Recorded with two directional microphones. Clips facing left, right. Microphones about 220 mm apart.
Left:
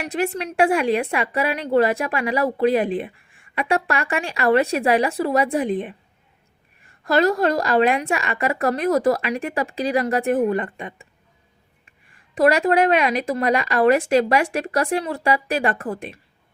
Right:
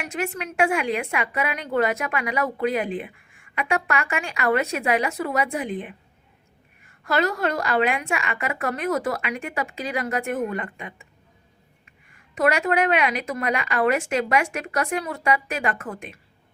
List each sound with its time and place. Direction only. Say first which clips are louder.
0.0 s a woman's voice: left 5 dB; 35° left (ahead or behind)
7.0 s a woman's voice: left 5 dB; 35° left (ahead or behind)
12.3 s a woman's voice: left 5 dB; 35° left (ahead or behind)